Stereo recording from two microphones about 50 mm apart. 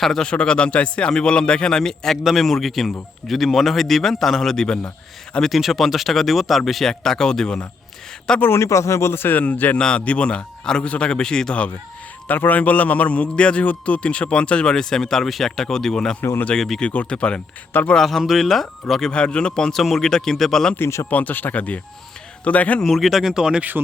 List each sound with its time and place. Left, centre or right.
0.0 s speech: centre
0.3 s speech: centre
5.4 s speech: centre
8.5 s speech: left
9.7 s a man's voice: centre
12.3 s a man's voice: left; by 16.8 s centre
16.8 s a man's voice: left
17.9 s speech: centre
19.1 s a man's voice: centre
21.1 s a man's voice: left
22.8 s speech: centre